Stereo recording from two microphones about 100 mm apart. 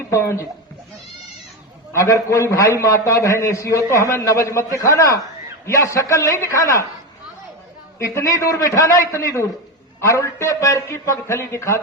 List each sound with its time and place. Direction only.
0.1 s speech: 30° left (ahead or behind)
1.9 s a man's voice: 30° left (ahead or behind)
7.9 s a man's voice: 30° left (ahead or behind)